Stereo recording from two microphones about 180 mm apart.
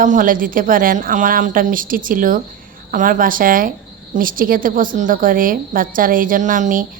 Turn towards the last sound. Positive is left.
turn(degrees=-45)  # may be behind; listen again after turning